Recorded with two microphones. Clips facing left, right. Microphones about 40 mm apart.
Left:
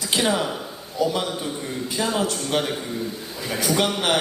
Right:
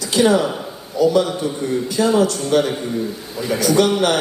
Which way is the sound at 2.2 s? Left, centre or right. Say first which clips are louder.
Right 7 dB; left.